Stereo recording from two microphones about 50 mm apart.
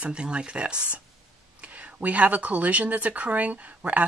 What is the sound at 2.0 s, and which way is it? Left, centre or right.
Speech, right.